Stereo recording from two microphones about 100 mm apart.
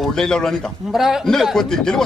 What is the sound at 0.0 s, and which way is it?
A man's voice, 5° left (ahead or behind).